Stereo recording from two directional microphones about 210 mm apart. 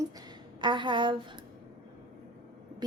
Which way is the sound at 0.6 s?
20° right (ahead or behind).